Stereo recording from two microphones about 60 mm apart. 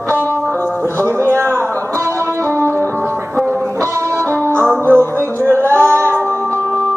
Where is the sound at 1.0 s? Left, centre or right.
Right.